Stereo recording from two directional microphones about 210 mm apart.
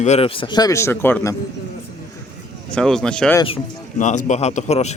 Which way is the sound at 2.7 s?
5° left (ahead or behind).